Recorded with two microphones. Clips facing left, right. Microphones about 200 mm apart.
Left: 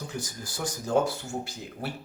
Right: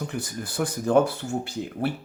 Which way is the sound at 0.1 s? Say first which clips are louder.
Right 5 dB; 60° right (ahead or behind).